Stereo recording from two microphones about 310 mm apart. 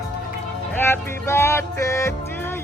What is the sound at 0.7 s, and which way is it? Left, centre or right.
Music, centre.